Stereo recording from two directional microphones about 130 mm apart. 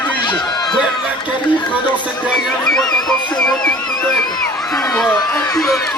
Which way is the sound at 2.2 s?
Centre (ahead or behind).